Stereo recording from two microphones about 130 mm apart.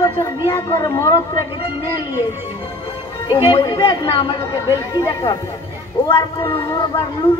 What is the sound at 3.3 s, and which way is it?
A woman's voice, 25° left (ahead or behind).